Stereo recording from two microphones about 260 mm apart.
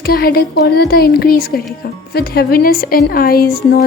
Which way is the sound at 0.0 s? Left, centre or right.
Left.